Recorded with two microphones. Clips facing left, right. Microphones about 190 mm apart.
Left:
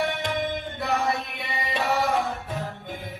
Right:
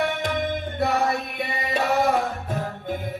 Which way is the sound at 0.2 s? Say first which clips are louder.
Right 2 dB; 45° right (ahead or behind).